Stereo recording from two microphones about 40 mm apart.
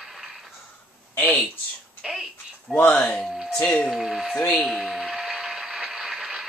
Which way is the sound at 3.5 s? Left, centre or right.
Left.